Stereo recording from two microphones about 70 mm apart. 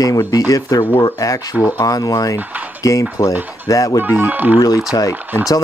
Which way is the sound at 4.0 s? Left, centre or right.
Right.